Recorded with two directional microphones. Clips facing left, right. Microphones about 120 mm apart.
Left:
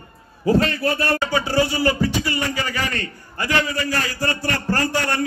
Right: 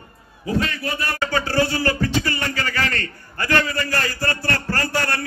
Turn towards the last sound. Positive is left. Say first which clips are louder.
# left 2 dB
turn(degrees=15)  # may be behind; listen again after turning